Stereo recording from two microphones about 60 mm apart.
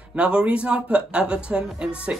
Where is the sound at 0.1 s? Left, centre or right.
Centre.